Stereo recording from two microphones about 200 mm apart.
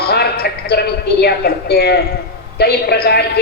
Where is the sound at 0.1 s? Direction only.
50° left (ahead or behind).